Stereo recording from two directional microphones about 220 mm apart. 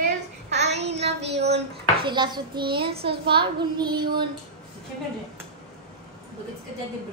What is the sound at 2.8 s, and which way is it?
Speech, 45° right (ahead or behind).